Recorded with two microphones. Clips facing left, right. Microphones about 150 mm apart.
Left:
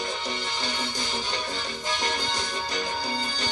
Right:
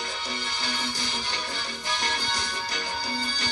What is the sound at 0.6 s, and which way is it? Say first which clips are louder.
Music: left 1 dB; 20° left (ahead or behind).